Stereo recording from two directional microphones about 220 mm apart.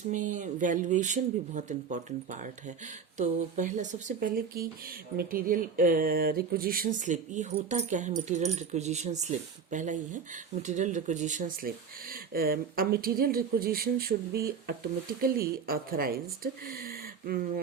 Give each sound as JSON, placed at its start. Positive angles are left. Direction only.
{"t": 0.3, "sound": "speech", "side_deg": -35}